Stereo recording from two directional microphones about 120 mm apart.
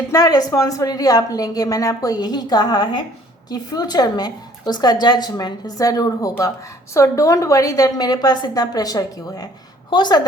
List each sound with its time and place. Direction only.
0.1 s a woman's voice: 30° left (ahead or behind)